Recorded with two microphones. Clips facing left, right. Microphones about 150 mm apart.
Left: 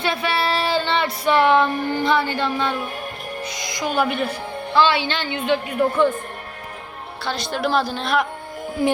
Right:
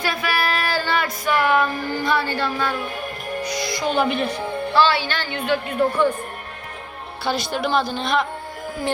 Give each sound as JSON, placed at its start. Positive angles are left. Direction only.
{"t": 0.0, "sound": "female singing", "side_deg": 25}
{"t": 3.4, "sound": "music", "side_deg": 20}
{"t": 3.9, "sound": "a woman's voice", "side_deg": 5}
{"t": 4.7, "sound": "a woman's voice", "side_deg": 20}
{"t": 7.3, "sound": "a woman's voice", "side_deg": -5}